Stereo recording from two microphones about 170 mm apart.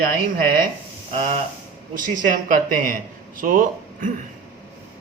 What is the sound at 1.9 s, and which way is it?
Speech, 50° right (ahead or behind).